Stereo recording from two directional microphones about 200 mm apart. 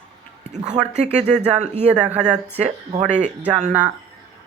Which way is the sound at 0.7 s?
35° right (ahead or behind).